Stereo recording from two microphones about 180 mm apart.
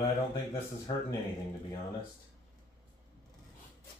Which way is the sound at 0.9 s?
25° left (ahead or behind).